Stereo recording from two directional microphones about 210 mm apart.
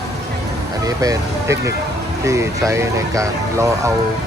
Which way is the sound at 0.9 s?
15° right (ahead or behind).